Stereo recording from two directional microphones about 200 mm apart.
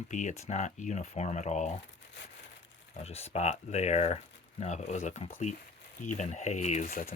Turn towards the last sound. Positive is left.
turn(degrees=40)  # may be behind; listen again after turning